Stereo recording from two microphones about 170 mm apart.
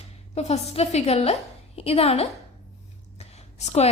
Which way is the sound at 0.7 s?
40° left (ahead or behind).